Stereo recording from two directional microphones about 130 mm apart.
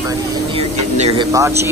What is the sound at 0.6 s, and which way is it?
Speech, 55° right (ahead or behind).